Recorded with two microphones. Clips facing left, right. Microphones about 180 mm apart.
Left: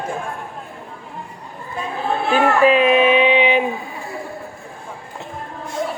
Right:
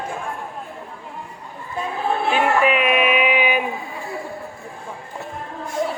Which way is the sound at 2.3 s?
30° left (ahead or behind).